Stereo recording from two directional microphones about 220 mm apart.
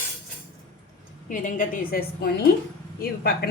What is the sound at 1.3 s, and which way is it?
A woman's voice, 35° left (ahead or behind).